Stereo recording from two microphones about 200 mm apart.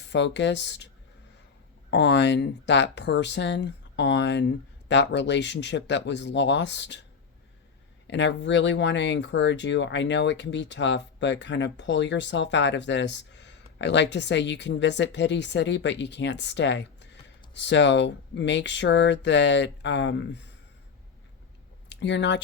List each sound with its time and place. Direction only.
0.1 s speech: 60° left (ahead or behind)
1.9 s speech: 60° left (ahead or behind)
8.0 s speech: 65° left (ahead or behind)
21.8 s speech: 60° left (ahead or behind)